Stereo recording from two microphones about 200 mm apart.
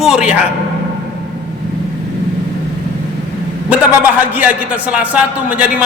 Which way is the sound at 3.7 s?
10° right (ahead or behind).